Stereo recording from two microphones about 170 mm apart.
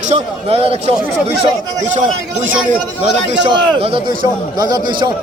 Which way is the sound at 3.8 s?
30° right (ahead or behind).